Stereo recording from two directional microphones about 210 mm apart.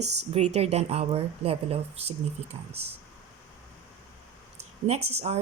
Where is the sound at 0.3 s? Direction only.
30° right (ahead or behind).